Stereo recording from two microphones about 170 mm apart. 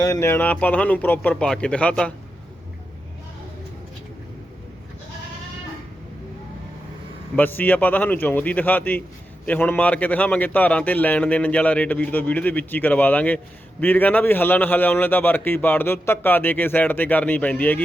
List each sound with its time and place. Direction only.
0.0 s a man's voice: 15° left (ahead or behind)
7.3 s a man's voice: 10° left (ahead or behind)